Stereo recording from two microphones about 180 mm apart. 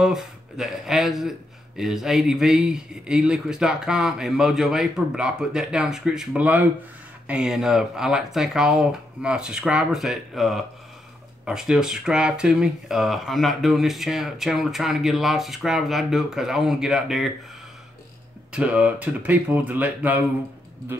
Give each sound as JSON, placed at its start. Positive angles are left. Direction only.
{"t": 0.0, "sound": "speech", "side_deg": 0}
{"t": 18.5, "sound": "speech", "side_deg": -5}